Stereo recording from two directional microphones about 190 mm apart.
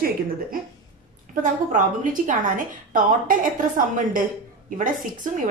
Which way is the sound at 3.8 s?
45° right (ahead or behind).